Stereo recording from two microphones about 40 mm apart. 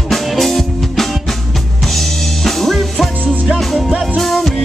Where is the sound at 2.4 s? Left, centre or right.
Centre.